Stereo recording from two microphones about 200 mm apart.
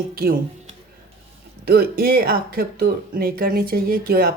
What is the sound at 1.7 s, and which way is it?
Speech, 50° right (ahead or behind).